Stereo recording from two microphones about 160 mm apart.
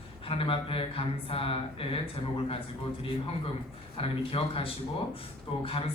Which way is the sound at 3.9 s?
35° left (ahead or behind).